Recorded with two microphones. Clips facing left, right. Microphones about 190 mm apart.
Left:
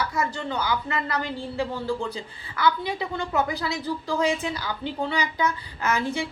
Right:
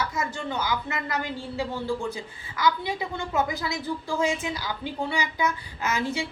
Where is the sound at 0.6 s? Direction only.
15° right (ahead or behind).